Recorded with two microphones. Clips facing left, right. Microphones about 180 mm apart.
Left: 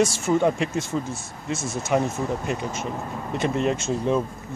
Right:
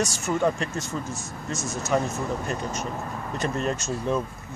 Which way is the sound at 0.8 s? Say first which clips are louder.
Left 4 dB; 30° left (ahead or behind).